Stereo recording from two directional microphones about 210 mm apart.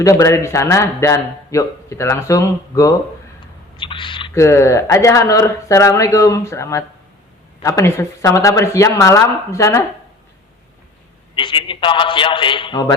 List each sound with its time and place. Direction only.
0.0 s speech: 15° left (ahead or behind)
11.3 s a man's voice: 25° left (ahead or behind)